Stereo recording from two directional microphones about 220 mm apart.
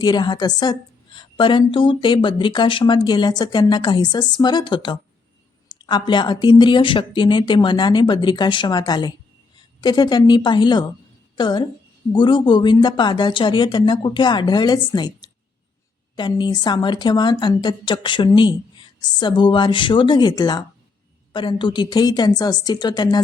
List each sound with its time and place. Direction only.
0.0 s a woman's voice: 20° left (ahead or behind)